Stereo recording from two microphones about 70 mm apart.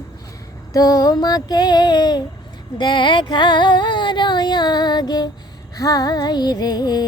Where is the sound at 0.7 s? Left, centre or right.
Left.